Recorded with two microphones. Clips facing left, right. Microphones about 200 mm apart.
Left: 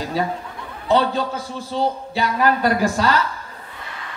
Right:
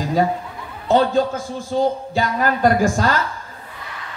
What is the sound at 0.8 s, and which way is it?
Speech, 50° right (ahead or behind).